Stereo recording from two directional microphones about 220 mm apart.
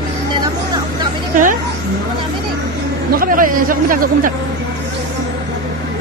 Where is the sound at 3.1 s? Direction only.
40° right (ahead or behind).